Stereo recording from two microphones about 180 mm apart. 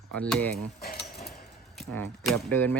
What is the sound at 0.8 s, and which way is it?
Cutlery, 60° left (ahead or behind).